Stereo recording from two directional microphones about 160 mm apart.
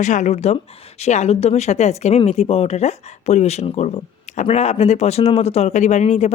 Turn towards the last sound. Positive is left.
turn(degrees=45)  # may be behind; listen again after turning